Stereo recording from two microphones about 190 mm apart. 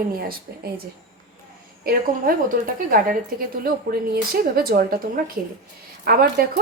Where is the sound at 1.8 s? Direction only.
50° right (ahead or behind).